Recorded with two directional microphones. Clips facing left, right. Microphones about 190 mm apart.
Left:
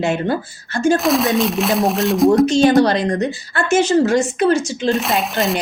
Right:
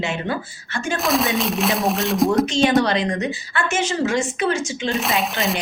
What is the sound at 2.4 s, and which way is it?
Speech, 40° left (ahead or behind).